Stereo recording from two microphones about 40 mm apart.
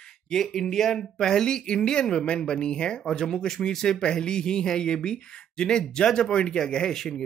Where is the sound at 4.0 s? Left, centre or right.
Left.